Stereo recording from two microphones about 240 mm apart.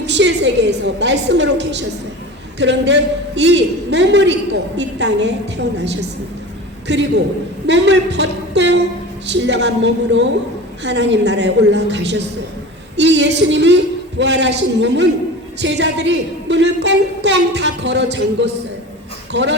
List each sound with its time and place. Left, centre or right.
0.0 s a man's voice: right